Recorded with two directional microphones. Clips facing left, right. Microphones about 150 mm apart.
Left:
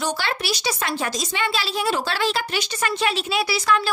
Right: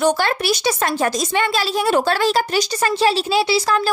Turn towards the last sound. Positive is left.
turn(degrees=-35)  # may be behind; listen again after turning